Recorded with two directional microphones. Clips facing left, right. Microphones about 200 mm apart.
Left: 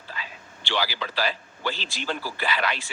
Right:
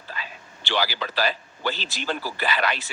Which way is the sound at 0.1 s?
50° right (ahead or behind).